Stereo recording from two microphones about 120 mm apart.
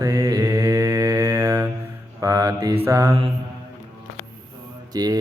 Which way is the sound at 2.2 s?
30° right (ahead or behind).